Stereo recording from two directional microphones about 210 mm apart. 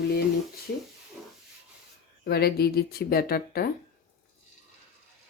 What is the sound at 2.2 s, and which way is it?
Speech, 50° left (ahead or behind).